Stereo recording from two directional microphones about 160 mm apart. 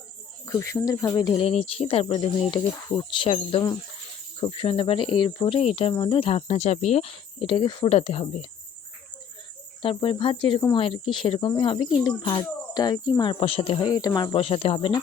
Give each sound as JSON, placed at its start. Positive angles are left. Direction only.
{"t": 0.4, "sound": "speech", "side_deg": 20}
{"t": 9.8, "sound": "speech", "side_deg": 35}
{"t": 13.4, "sound": "speech", "side_deg": 35}
{"t": 14.3, "sound": "speech", "side_deg": 40}